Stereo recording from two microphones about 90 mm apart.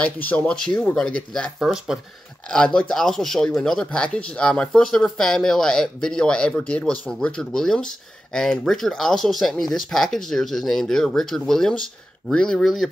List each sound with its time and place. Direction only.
0.0 s speech: 15° left (ahead or behind)
1.6 s speech: 5° right (ahead or behind)
2.4 s speech: 10° left (ahead or behind)